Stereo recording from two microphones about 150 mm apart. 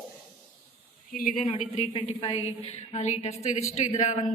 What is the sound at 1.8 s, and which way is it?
A woman's voice, 40° left (ahead or behind).